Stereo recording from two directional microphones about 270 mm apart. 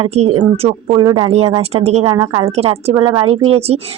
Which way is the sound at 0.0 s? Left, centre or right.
Right.